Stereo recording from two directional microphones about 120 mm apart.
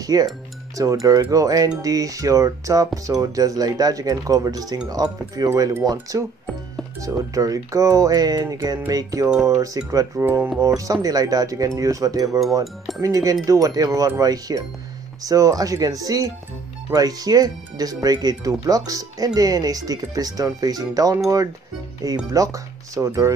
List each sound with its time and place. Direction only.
0.0 s speech: 30° right (ahead or behind)
10.1 s speech: 15° right (ahead or behind)
10.8 s speech: 30° right (ahead or behind)
12.3 s speech: centre (ahead or behind)
13.0 s speech: 30° right (ahead or behind)